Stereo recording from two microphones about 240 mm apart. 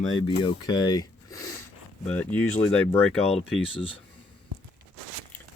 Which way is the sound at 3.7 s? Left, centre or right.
Left.